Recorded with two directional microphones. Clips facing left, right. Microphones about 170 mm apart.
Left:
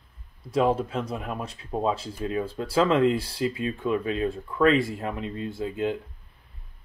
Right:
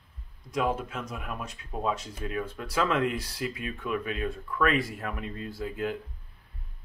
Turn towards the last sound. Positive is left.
turn(degrees=25)  # may be behind; listen again after turning